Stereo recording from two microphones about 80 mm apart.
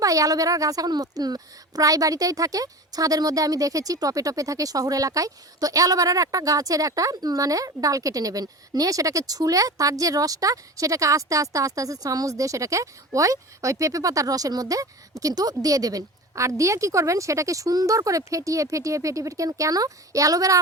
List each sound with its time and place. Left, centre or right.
0.0 s a woman's voice: right